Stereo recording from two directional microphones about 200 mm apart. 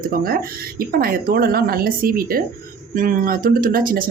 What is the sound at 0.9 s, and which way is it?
Speech, 50° right (ahead or behind).